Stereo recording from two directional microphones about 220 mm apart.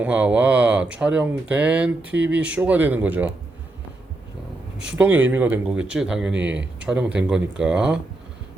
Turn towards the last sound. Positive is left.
turn(degrees=-5)  # may be behind; listen again after turning